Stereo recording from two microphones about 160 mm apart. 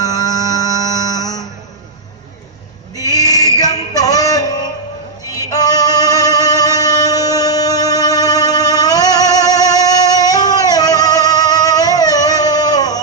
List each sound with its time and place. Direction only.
0.0 s music: 25° left (ahead or behind)
2.9 s a sound: 20° left (ahead or behind)
5.3 s music: 25° left (ahead or behind)